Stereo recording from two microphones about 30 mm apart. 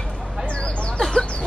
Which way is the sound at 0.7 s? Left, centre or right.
Left.